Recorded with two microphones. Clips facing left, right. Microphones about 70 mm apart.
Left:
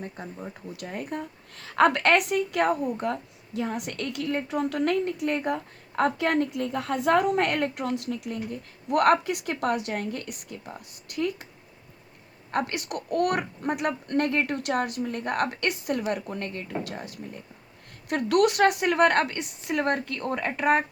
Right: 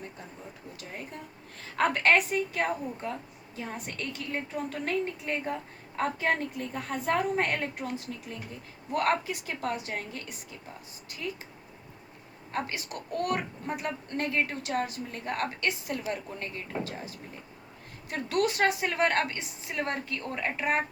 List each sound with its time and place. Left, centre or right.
0.8 s a woman's voice: left
12.5 s a woman's voice: left